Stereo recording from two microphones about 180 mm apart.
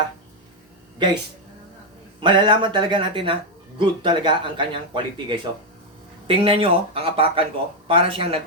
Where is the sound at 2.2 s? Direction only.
25° right (ahead or behind).